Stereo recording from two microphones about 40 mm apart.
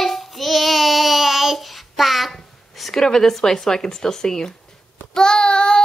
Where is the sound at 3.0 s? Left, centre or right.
Centre.